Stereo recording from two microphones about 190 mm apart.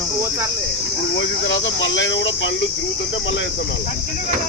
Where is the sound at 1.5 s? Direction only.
75° left (ahead or behind).